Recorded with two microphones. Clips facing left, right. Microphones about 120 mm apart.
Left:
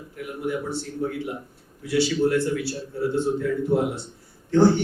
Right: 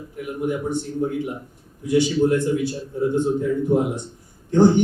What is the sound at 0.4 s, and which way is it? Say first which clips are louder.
A man's voice: right 4 dB; 20° right (ahead or behind).